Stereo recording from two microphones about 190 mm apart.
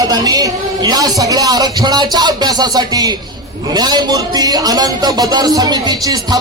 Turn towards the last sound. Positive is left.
turn(degrees=-20)  # may be behind; listen again after turning